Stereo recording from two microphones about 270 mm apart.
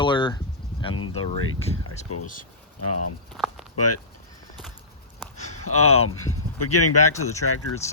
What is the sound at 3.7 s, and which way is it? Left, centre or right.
Speech, left.